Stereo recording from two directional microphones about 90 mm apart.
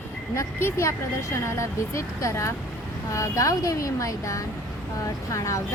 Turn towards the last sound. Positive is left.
turn(degrees=35)  # may be behind; listen again after turning